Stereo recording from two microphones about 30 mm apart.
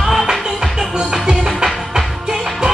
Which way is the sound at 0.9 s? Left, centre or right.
Right.